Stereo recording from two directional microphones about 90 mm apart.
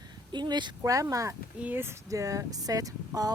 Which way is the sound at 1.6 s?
25° right (ahead or behind).